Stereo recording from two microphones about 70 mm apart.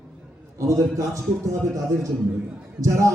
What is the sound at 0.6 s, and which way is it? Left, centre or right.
A man's voice, right.